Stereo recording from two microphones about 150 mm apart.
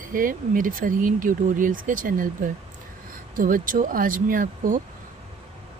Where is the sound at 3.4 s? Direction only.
65° right (ahead or behind).